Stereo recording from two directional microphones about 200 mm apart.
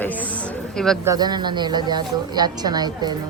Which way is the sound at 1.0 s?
20° right (ahead or behind).